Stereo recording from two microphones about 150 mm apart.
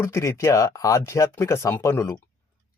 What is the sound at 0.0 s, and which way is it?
Speech, 20° left (ahead or behind).